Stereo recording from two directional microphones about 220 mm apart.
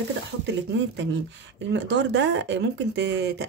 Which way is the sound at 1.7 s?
55° right (ahead or behind).